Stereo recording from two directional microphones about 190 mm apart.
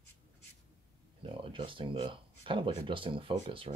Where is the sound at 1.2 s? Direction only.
25° right (ahead or behind).